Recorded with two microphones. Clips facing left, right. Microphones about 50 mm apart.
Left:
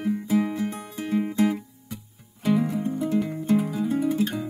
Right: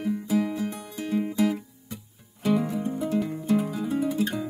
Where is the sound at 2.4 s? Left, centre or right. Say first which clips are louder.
Left 1 dB; centre.